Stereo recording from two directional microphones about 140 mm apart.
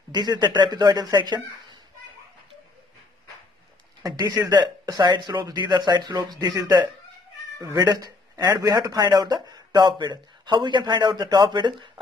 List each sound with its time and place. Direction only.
0.1 s a man's voice: 30° right (ahead or behind)
4.0 s a man's voice: 25° right (ahead or behind)